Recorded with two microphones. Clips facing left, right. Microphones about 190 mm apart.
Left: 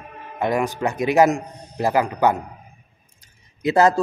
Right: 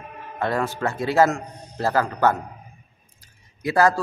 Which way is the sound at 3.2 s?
20° left (ahead or behind).